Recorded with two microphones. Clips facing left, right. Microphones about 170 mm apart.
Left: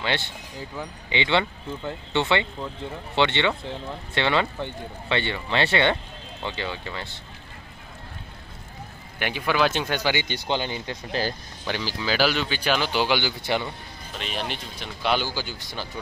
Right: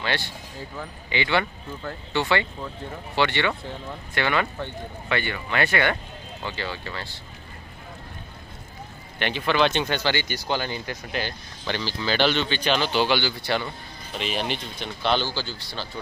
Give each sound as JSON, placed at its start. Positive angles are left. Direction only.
{"t": 0.0, "sound": "speech", "side_deg": 20}
{"t": 9.2, "sound": "speech", "side_deg": 10}
{"t": 10.2, "sound": "speech", "side_deg": 25}
{"t": 11.1, "sound": "speech", "side_deg": 35}
{"t": 11.6, "sound": "speech", "side_deg": 5}
{"t": 14.1, "sound": "speech", "side_deg": 0}